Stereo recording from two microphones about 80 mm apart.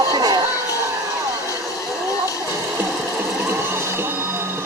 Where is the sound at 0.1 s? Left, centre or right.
Right.